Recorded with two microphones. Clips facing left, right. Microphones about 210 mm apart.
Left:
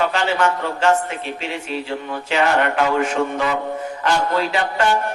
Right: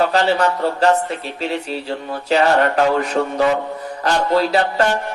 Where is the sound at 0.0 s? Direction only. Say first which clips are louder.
Right 3 dB; 35° right (ahead or behind).